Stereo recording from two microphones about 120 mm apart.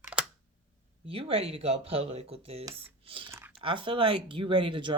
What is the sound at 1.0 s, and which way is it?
Speech, 55° right (ahead or behind).